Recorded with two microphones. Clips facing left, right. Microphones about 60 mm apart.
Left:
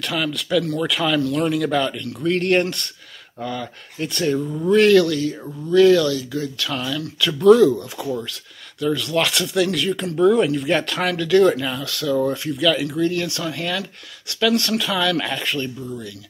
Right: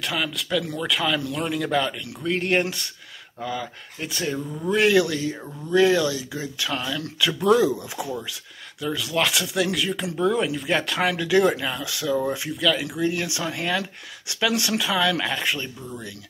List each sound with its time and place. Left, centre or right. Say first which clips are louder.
0.0 s speech: left 3 dB; centre
4.6 s speech: left 5 dB; centre
12.5 s speech: left 3 dB; centre
12.9 s speech: left 4 dB; centre